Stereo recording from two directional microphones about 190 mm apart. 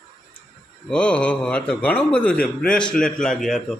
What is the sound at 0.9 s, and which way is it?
A man's voice, 5° left (ahead or behind).